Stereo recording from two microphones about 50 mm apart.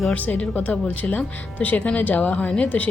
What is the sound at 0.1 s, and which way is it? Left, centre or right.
Speech, left.